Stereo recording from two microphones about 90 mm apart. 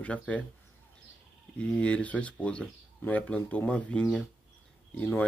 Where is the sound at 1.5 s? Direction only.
15° left (ahead or behind).